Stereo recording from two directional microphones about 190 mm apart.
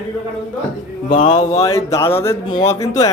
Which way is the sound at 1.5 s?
15° left (ahead or behind).